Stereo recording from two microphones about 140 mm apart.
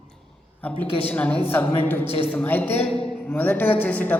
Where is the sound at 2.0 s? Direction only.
45° left (ahead or behind).